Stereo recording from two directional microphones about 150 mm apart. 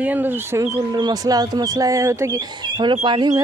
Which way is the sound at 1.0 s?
25° right (ahead or behind).